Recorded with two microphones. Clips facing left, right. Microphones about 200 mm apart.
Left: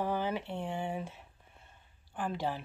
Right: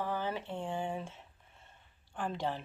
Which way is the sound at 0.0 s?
15° left (ahead or behind).